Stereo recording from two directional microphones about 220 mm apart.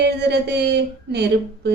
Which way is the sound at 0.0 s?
50° right (ahead or behind).